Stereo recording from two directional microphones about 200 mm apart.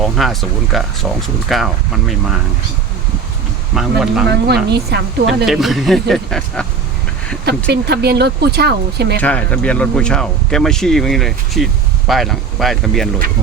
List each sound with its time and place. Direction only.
0.0 s speech: centre (ahead or behind)
3.8 s speech: centre (ahead or behind)
4.3 s speech: 55° right (ahead or behind)
5.5 s speech: centre (ahead or behind)
7.7 s speech: 55° right (ahead or behind)
9.2 s speech: 5° left (ahead or behind)